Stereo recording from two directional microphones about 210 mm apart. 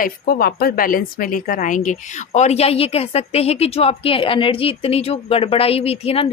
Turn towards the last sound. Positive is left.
turn(degrees=30)  # may be behind; listen again after turning